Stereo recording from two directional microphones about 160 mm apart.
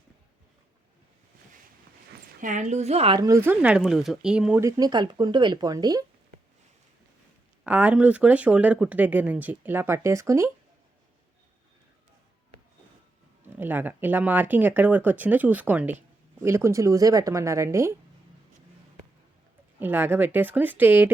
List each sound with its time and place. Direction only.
2.4 s a woman's voice: 50° right (ahead or behind)
3.2 s speech: 20° right (ahead or behind)
4.6 s a woman's voice: 25° right (ahead or behind)
7.6 s speech: 10° right (ahead or behind)
13.6 s a woman's voice: 10° right (ahead or behind)
19.8 s speech: 10° right (ahead or behind)